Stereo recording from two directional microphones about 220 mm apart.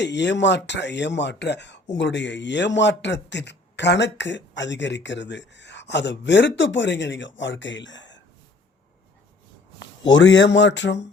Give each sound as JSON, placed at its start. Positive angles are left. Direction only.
{"t": 0.0, "sound": "speech", "side_deg": 55}
{"t": 9.8, "sound": "a man's voice", "side_deg": 55}